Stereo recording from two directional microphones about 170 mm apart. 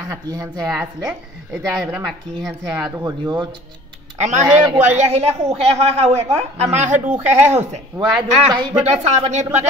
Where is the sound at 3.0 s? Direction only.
25° right (ahead or behind).